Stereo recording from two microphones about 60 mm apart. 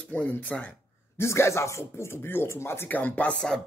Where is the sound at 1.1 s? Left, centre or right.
Left.